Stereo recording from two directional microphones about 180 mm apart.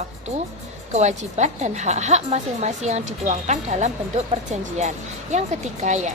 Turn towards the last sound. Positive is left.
turn(degrees=-40)  # may be behind; listen again after turning